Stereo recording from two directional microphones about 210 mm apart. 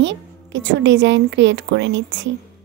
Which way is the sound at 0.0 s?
60° right (ahead or behind).